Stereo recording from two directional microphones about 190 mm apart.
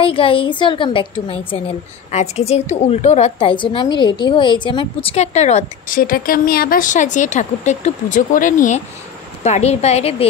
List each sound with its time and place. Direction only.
0.0 s a woman's voice: 30° left (ahead or behind)